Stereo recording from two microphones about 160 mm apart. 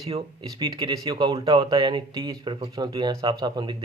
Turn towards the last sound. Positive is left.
turn(degrees=-25)  # may be behind; listen again after turning